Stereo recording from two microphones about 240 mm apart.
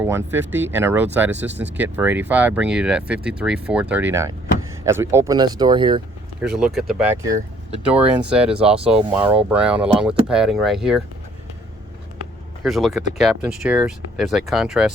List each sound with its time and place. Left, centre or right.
0.3 s speech: centre
6.4 s speech: centre
7.3 s speech: right
8.2 s speech: centre
12.6 s speech: centre